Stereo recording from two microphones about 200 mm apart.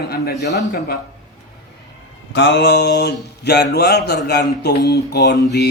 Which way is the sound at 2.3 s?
60° left (ahead or behind).